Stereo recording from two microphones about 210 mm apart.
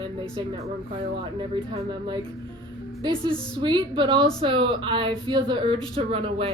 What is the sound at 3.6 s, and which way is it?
A woman's voice, 20° right (ahead or behind).